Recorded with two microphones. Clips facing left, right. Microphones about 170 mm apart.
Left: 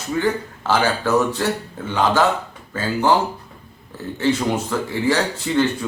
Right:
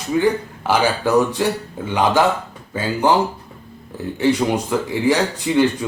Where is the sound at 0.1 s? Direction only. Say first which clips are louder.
Right 4 dB; 15° right (ahead or behind).